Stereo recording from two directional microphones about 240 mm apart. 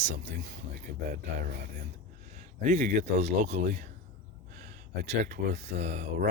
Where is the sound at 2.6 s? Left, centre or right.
Right.